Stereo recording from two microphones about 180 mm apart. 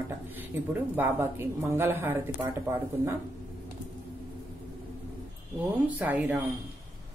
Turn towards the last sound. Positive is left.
turn(degrees=-10)  # may be behind; listen again after turning